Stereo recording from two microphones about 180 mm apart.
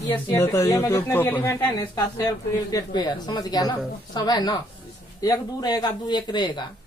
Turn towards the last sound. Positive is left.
turn(degrees=25)  # may be behind; listen again after turning